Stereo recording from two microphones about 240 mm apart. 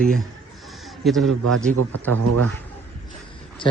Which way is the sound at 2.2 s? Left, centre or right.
Right.